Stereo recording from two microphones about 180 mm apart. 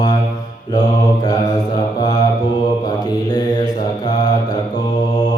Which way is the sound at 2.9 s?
20° left (ahead or behind).